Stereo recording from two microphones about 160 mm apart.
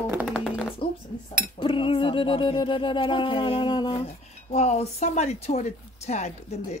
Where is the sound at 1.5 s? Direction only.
35° left (ahead or behind).